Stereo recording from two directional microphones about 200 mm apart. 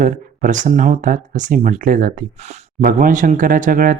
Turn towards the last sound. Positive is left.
turn(degrees=-40)  # may be behind; listen again after turning